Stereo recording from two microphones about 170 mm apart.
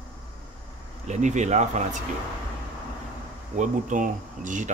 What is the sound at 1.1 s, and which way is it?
Speech, 45° right (ahead or behind).